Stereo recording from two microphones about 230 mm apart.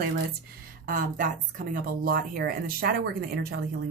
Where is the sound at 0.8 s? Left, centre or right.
Right.